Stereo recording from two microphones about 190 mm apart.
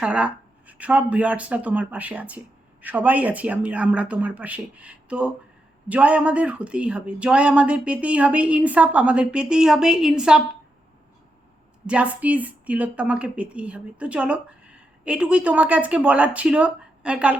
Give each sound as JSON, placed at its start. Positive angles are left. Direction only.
{"t": 0.0, "sound": "speech", "side_deg": -5}
{"t": 11.9, "sound": "speech", "side_deg": -5}